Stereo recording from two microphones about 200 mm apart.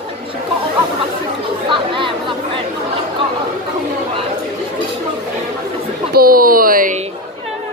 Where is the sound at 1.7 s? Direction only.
25° right (ahead or behind).